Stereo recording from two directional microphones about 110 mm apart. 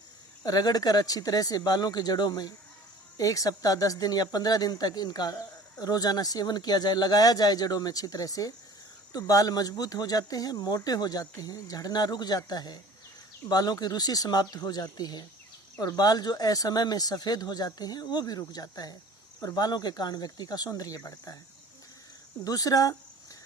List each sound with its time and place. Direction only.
0.4 s speech: 35° left (ahead or behind)
22.4 s speech: 35° left (ahead or behind)